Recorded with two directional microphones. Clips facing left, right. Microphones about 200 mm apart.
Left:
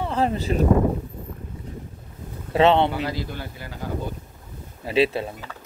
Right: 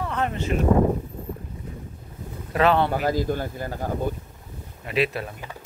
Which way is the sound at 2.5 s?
25° left (ahead or behind).